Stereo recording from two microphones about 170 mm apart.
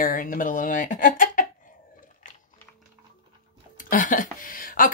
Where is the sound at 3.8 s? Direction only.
50° left (ahead or behind).